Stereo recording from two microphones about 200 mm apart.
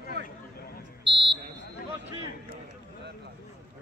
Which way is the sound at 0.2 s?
55° right (ahead or behind).